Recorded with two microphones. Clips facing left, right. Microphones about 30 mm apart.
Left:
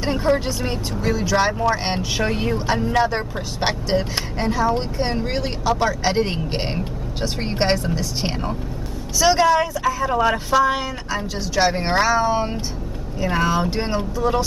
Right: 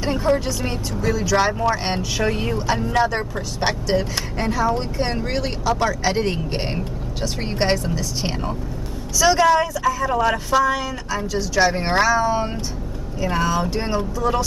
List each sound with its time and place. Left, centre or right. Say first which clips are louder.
0.0 s a woman's voice: even; centre
10.6 s a woman's voice: left 1 dB; left
11.1 s speech: right 2 dB; centre